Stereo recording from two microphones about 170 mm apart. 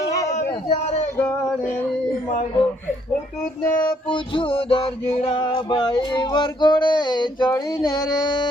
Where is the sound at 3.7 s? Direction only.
10° left (ahead or behind).